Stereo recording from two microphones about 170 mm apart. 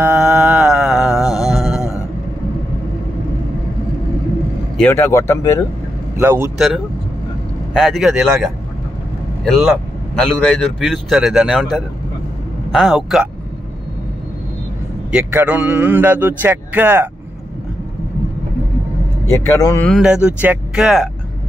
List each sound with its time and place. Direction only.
0.0 s music: 5° right (ahead or behind)
4.7 s speech: 10° left (ahead or behind)
6.1 s a man's voice: 15° right (ahead or behind)
7.7 s speech: centre (ahead or behind)
12.7 s speech: centre (ahead or behind)
15.0 s a man's voice: 5° right (ahead or behind)
19.3 s speech: 15° left (ahead or behind)
19.9 s speech: 5° right (ahead or behind)